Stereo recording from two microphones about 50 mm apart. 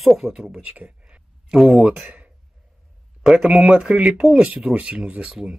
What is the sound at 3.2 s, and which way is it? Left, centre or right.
Speech, centre.